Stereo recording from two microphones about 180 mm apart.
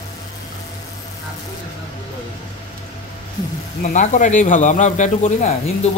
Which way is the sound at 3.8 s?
45° left (ahead or behind).